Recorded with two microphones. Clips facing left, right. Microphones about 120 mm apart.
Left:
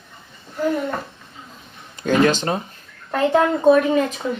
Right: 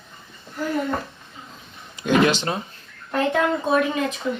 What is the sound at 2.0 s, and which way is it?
Speech, 45° left (ahead or behind).